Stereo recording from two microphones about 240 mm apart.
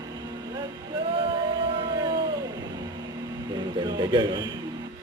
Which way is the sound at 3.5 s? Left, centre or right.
Centre.